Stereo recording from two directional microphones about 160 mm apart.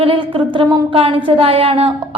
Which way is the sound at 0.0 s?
35° right (ahead or behind).